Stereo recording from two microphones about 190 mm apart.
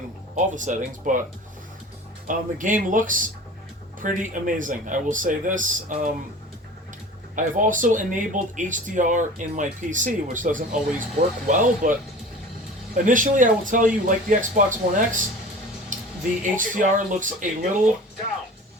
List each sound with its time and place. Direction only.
0.3 s speech: 40° right (ahead or behind)
2.2 s speech: 45° right (ahead or behind)
7.3 s speech: 45° right (ahead or behind)
15.9 s a sound: 45° right (ahead or behind)
16.4 s speech: 45° right (ahead or behind)